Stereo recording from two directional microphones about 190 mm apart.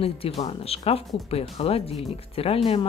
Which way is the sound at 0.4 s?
30° left (ahead or behind).